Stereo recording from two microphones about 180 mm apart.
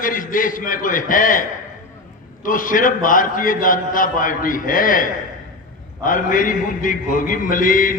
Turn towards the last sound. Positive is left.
turn(degrees=50)  # may be behind; listen again after turning